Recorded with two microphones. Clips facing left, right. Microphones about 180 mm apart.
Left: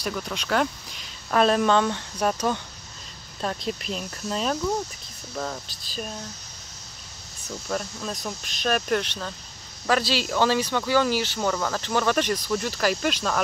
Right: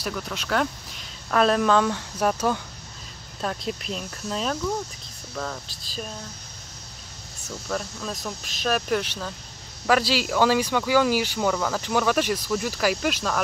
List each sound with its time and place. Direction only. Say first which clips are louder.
0.0 s speech: left 1 dB; centre (ahead or behind)
5.3 s speech: left 1 dB; 15° left (ahead or behind)
5.9 s speech: left 1 dB; 5° left (ahead or behind)
7.4 s speech: even; centre (ahead or behind)